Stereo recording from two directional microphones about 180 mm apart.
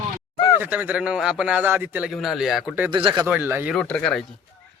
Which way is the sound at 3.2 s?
10° right (ahead or behind).